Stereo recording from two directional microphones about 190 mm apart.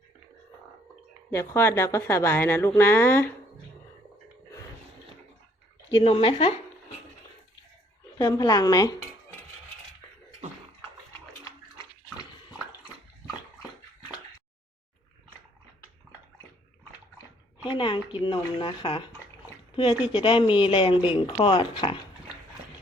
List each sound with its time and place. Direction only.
1.3 s speech: 15° left (ahead or behind)
5.9 s speech: 30° left (ahead or behind)
8.2 s speech: 20° left (ahead or behind)
17.7 s speech: 25° left (ahead or behind)